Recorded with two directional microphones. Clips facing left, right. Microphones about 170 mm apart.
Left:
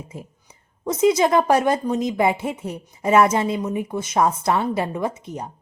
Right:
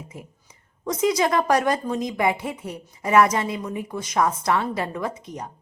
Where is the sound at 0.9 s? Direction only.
25° left (ahead or behind).